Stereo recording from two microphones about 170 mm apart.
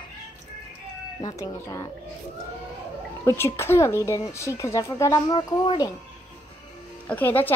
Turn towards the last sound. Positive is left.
turn(degrees=10)  # may be behind; listen again after turning